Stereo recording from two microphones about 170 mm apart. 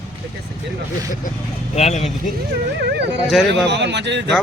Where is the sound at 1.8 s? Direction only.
40° left (ahead or behind).